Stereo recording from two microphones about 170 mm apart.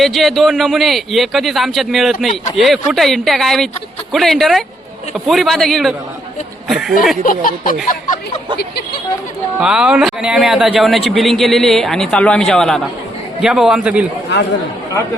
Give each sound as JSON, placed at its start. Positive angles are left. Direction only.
{"t": 0.0, "sound": "a man's voice", "side_deg": 0}
{"t": 7.3, "sound": "speech", "side_deg": 55}
{"t": 9.6, "sound": "a man's voice", "side_deg": -5}